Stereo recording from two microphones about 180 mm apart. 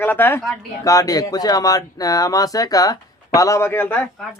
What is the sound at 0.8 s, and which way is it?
Speech, 20° left (ahead or behind).